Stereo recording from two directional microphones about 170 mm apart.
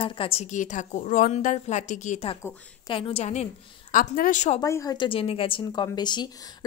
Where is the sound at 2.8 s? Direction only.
30° left (ahead or behind).